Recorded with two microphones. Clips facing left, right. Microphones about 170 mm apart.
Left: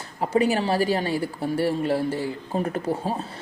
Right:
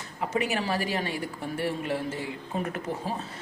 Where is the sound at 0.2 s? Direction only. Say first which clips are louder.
Left 7 dB; 30° left (ahead or behind).